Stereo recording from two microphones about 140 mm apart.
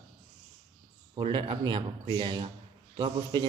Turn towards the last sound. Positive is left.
turn(degrees=-30)  # may be behind; listen again after turning